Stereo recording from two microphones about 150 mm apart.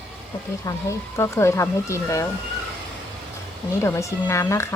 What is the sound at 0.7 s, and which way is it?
Speech, 20° left (ahead or behind).